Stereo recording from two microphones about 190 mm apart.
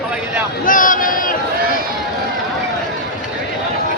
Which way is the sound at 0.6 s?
45° left (ahead or behind).